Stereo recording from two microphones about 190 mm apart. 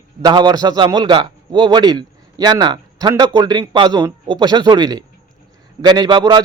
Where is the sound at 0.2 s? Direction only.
20° right (ahead or behind).